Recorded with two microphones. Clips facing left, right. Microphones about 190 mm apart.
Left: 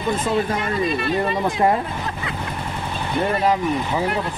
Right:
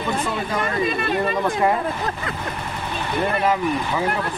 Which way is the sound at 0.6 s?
50° right (ahead or behind).